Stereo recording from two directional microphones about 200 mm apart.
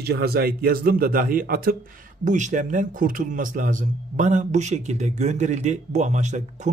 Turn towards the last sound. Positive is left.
turn(degrees=-35)  # may be behind; listen again after turning